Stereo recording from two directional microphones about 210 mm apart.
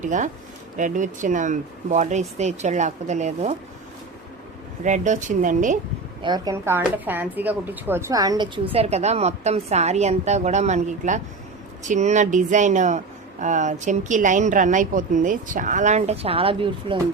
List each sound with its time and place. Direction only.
0.0 s a woman's voice: 35° right (ahead or behind)
4.8 s a woman's voice: 35° right (ahead or behind)
6.2 s a woman's voice: 20° right (ahead or behind)